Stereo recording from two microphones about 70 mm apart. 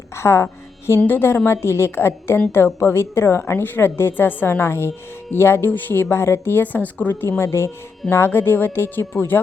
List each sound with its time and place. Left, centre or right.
0.2 s a woman's voice: left